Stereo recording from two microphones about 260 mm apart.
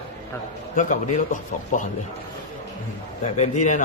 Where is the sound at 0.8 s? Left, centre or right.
Left.